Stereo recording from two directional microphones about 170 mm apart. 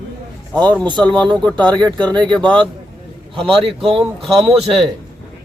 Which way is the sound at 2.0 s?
5° left (ahead or behind).